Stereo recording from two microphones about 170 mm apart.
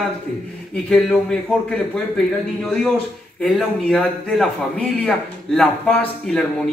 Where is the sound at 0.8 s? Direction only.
5° left (ahead or behind).